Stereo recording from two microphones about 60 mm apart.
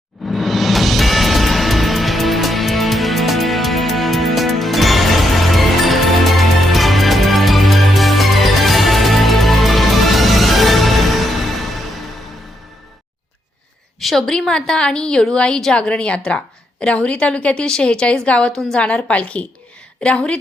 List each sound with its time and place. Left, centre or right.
0.3 s music: centre
14.0 s a woman's voice: centre